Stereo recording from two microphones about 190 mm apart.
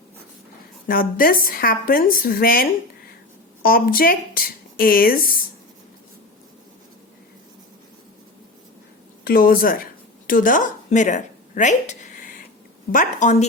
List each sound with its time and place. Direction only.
0.9 s speech: 50° left (ahead or behind)
9.2 s a woman's voice: 50° left (ahead or behind)